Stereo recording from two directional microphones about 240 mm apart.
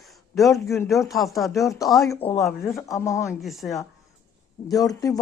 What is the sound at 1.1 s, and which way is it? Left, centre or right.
Speech, centre.